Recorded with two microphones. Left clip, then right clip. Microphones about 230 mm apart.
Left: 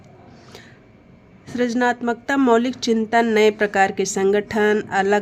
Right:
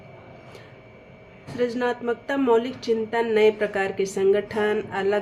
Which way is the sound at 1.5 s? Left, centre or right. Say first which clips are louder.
Left 4 dB; left.